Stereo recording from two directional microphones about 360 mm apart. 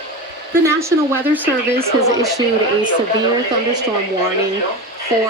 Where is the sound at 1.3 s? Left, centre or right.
Centre.